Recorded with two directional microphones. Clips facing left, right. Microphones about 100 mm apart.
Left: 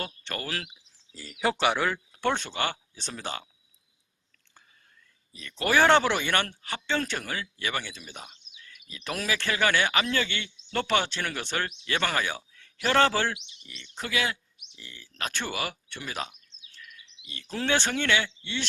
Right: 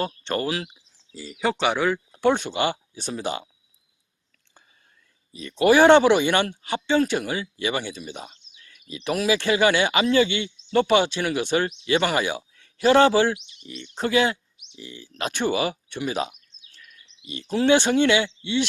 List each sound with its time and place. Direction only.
0.0 s speech: 25° right (ahead or behind)
1.1 s speech: 5° right (ahead or behind)
5.3 s speech: 20° right (ahead or behind)
8.3 s bird vocalization: 30° right (ahead or behind)
8.9 s speech: 20° right (ahead or behind)
13.6 s speech: 30° right (ahead or behind)